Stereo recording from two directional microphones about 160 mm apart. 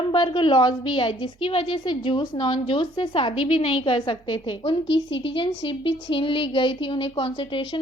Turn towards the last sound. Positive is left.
turn(degrees=30)  # may be behind; listen again after turning